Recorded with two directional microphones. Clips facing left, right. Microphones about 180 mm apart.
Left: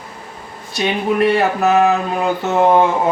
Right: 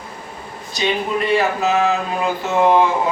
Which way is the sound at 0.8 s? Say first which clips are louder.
Left 4 dB; 65° left (ahead or behind).